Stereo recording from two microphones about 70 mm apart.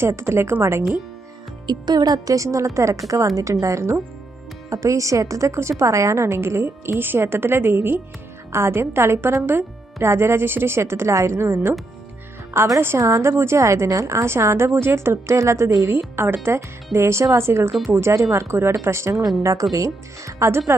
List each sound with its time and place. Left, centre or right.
0.0 s a woman's voice: right
1.6 s a woman's voice: right
15.9 s a woman's voice: right
17.7 s speech: centre
17.9 s a woman's voice: right